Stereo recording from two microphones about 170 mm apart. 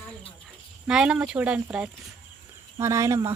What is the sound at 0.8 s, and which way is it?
Speech, 5° right (ahead or behind).